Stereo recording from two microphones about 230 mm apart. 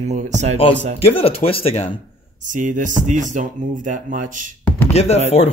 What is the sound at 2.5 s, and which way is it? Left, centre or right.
Speech, right.